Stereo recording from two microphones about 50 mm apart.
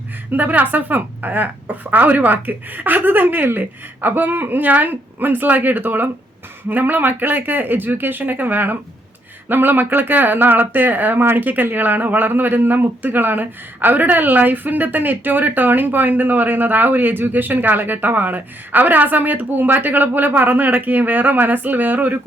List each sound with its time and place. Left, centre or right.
0.3 s speech: right